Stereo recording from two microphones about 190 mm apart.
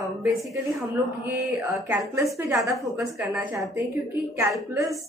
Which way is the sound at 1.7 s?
10° right (ahead or behind).